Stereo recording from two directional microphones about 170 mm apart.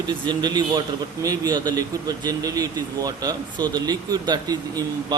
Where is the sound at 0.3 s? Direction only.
25° right (ahead or behind).